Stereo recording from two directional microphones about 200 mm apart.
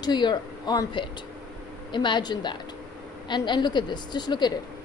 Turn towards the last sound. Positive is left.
turn(degrees=20)  # may be behind; listen again after turning